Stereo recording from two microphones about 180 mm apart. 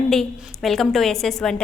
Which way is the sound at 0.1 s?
Centre (ahead or behind).